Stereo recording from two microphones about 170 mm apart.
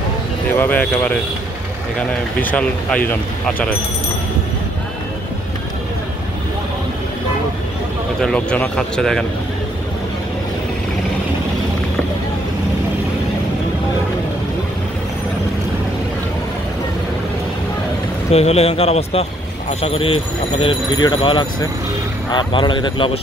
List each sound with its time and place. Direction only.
0.6 s speech: 10° left (ahead or behind)
8.2 s speech: 5° left (ahead or behind)
18.3 s speech: 40° left (ahead or behind)